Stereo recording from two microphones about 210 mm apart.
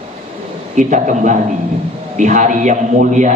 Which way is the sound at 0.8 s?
35° right (ahead or behind).